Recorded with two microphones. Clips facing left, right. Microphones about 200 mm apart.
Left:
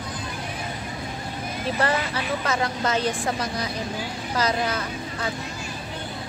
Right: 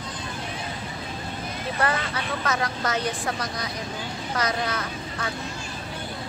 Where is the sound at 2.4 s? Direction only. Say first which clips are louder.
Left 1 dB; 30° left (ahead or behind).